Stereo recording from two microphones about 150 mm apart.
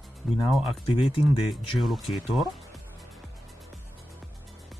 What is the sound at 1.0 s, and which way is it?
Speech, 35° left (ahead or behind).